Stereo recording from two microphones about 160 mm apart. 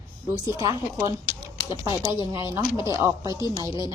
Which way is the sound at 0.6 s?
20° right (ahead or behind).